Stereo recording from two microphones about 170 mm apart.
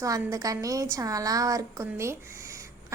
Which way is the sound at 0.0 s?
20° right (ahead or behind).